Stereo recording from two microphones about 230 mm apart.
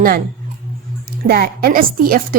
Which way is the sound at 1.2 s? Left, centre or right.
Right.